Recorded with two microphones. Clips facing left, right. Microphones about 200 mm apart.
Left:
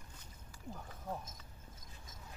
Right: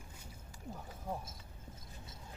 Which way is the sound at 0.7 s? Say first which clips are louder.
Right 2 dB; 10° right (ahead or behind).